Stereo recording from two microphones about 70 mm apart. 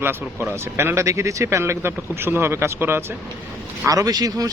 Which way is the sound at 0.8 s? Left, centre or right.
Right.